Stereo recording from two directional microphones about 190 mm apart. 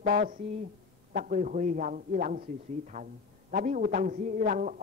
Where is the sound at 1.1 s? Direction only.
45° right (ahead or behind).